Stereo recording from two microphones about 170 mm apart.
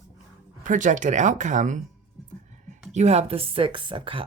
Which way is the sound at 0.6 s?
50° right (ahead or behind).